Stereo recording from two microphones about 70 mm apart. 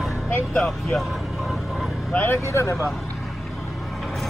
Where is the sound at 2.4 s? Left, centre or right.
Left.